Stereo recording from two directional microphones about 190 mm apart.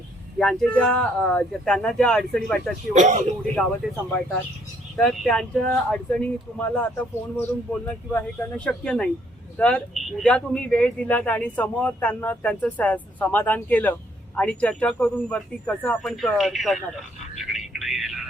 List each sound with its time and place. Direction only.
0.3 s speech: 5° left (ahead or behind)
2.9 s speech: 40° right (ahead or behind)
4.9 s speech: 5° left (ahead or behind)
17.3 s a sound: centre (ahead or behind)